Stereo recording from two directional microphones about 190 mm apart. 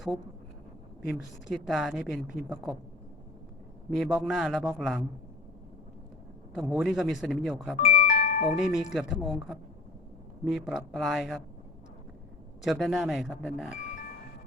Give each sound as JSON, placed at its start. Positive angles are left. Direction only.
{"t": 1.0, "sound": "a woman's voice", "side_deg": 0}
{"t": 3.9, "sound": "a woman's voice", "side_deg": 0}
{"t": 6.5, "sound": "a woman's voice", "side_deg": 0}
{"t": 7.8, "sound": "music", "side_deg": 45}
{"t": 8.4, "sound": "a woman's voice", "side_deg": 0}
{"t": 10.7, "sound": "a woman's voice", "side_deg": 0}
{"t": 12.6, "sound": "a woman's voice", "side_deg": 0}